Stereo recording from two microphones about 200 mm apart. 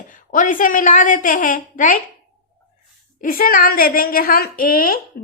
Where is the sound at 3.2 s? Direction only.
45° left (ahead or behind).